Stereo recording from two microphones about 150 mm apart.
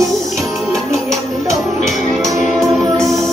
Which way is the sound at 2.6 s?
Centre (ahead or behind).